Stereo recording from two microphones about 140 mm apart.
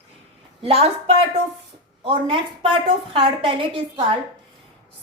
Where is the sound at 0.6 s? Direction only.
45° right (ahead or behind).